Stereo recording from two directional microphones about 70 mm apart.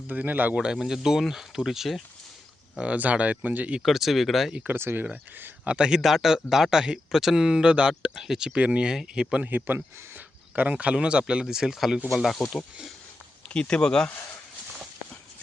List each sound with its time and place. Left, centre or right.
0.1 s speech: right
0.5 s speech: centre
2.7 s speech: centre
3.8 s speech: centre
4.6 s speech: right
5.6 s speech: centre
9.4 s speech: right; by 12.4 s centre
13.5 s speech: centre